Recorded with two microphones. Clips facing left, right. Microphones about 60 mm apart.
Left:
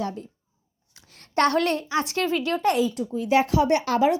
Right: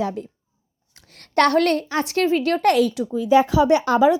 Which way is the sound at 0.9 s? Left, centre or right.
Right.